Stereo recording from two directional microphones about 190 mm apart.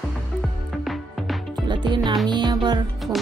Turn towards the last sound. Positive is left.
turn(degrees=-20)  # may be behind; listen again after turning